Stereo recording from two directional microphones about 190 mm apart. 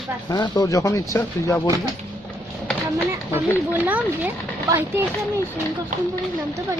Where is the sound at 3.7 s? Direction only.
10° right (ahead or behind).